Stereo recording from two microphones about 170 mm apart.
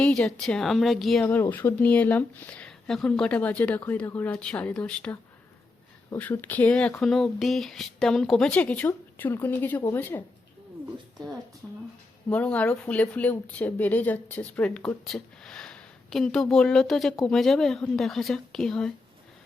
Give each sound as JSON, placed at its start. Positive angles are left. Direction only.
{"t": 0.0, "sound": "a woman's voice", "side_deg": 5}
{"t": 12.3, "sound": "speech", "side_deg": 10}